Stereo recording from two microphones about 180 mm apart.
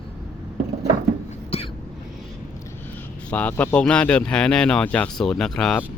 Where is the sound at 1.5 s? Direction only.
35° left (ahead or behind).